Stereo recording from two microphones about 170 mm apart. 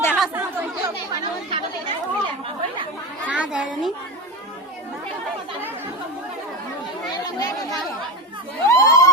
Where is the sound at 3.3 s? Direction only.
5° right (ahead or behind).